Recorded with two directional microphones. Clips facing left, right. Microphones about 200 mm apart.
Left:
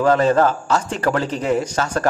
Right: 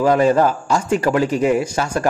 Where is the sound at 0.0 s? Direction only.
10° right (ahead or behind).